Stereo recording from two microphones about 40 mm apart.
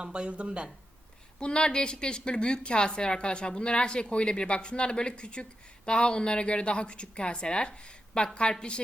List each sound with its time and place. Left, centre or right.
0.0 s speech: right
1.4 s a woman's voice: left